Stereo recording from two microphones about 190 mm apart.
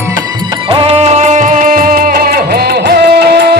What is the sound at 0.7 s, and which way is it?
Music, 30° right (ahead or behind).